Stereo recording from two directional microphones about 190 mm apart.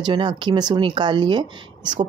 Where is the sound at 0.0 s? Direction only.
25° right (ahead or behind).